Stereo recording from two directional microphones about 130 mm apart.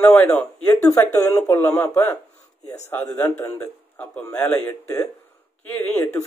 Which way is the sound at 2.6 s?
60° left (ahead or behind).